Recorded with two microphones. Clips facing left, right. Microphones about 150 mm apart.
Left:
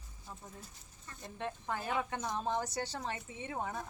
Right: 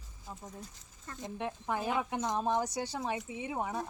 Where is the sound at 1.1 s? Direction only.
90° right.